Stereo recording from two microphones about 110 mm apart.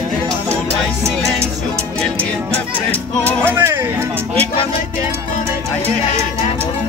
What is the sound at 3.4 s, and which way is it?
Speech, 20° right (ahead or behind).